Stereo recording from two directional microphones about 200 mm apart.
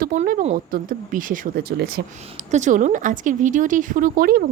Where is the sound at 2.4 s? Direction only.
35° right (ahead or behind).